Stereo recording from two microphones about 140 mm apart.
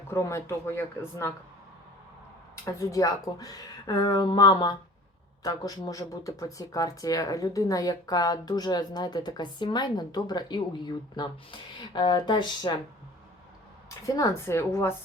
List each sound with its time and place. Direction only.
0.1 s speech: 20° left (ahead or behind)
2.7 s speech: 25° left (ahead or behind)
14.2 s speech: 20° left (ahead or behind)